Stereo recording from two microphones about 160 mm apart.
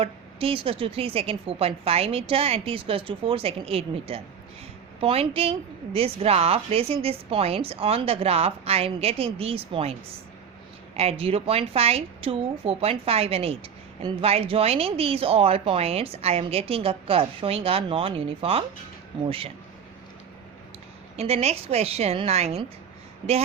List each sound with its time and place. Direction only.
0.0 s a woman's voice: 35° right (ahead or behind)
10.9 s a woman's voice: 40° right (ahead or behind)
21.2 s a woman's voice: 40° right (ahead or behind)